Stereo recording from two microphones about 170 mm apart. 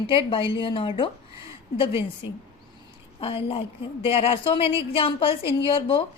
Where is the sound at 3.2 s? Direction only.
30° left (ahead or behind).